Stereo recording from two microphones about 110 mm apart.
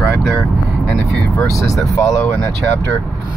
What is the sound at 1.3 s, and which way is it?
Speech, 30° left (ahead or behind).